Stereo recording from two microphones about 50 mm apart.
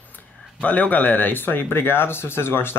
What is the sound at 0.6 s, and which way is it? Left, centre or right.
Speech, left.